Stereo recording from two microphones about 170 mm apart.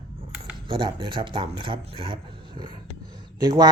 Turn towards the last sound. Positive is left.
turn(degrees=-25)  # may be behind; listen again after turning